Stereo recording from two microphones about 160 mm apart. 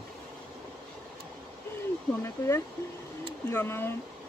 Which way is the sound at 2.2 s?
15° left (ahead or behind).